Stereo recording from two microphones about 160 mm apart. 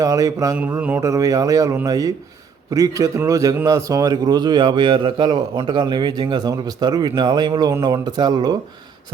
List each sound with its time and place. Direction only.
0.0 s a man's voice: 20° right (ahead or behind)
0.5 s a man's voice: 10° right (ahead or behind); by 8.5 s 25° right (ahead or behind)